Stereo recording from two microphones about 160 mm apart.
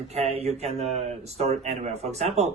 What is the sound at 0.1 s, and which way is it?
A man's voice, 40° right (ahead or behind).